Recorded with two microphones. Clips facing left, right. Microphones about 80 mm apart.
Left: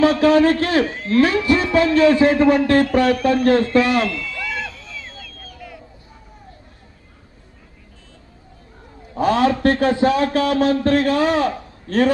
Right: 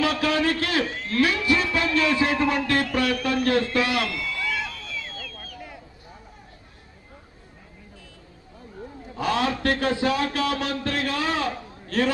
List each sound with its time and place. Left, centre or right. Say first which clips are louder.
0.0 s a man's voice: left 9 dB; left
5.5 s a sound: left 4 dB; right
9.1 s a man's voice: left 8 dB; left